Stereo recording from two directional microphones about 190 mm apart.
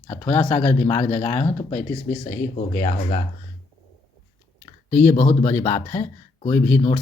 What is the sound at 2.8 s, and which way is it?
Speech, 40° left (ahead or behind).